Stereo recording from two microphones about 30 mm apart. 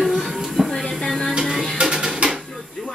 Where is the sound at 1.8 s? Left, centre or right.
Right.